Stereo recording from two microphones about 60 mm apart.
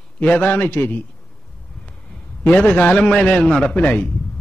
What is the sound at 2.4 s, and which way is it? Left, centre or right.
Speech, left.